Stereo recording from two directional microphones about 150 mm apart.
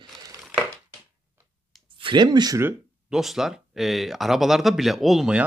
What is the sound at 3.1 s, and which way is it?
Speech, centre (ahead or behind).